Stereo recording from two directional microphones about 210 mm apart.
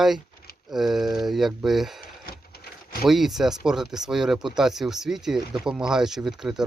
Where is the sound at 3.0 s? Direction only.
Centre (ahead or behind).